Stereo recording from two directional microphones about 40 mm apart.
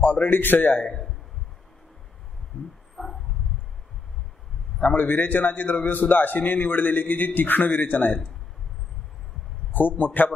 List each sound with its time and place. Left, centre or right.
0.0 s a man's voice: left
4.8 s a man's voice: left
9.7 s a man's voice: left